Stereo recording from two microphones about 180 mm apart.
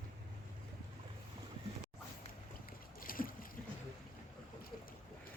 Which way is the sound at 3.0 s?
50° left (ahead or behind).